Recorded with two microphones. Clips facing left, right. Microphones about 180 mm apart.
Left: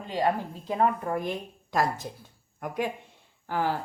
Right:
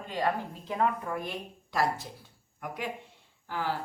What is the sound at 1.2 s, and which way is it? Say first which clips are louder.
Speech: left 5 dB; 45° left (ahead or behind).